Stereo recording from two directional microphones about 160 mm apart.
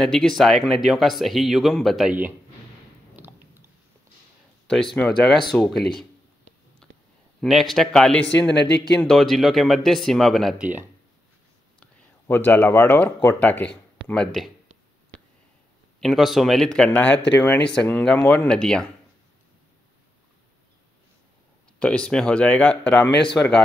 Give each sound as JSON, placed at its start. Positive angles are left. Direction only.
{"t": 0.0, "sound": "speech", "side_deg": 5}
{"t": 4.9, "sound": "speech", "side_deg": 5}
{"t": 6.8, "sound": "a sound", "side_deg": 5}
{"t": 7.3, "sound": "speech", "side_deg": 0}
{"t": 8.3, "sound": "speech", "side_deg": 90}
{"t": 9.0, "sound": "speech", "side_deg": 0}
{"t": 11.8, "sound": "speech", "side_deg": 10}
{"t": 16.0, "sound": "speech", "side_deg": 0}
{"t": 21.7, "sound": "speech", "side_deg": 5}